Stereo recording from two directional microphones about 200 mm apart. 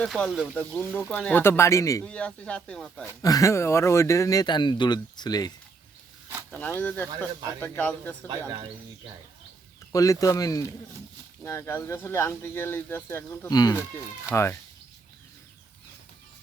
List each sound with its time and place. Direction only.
0.0 s speech: centre (ahead or behind)
3.2 s speech: 15° left (ahead or behind)
6.5 s speech: 10° left (ahead or behind)
9.9 s speech: 15° left (ahead or behind)